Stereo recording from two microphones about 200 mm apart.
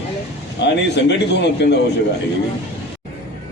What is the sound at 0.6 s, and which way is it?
A man's voice, 60° left (ahead or behind).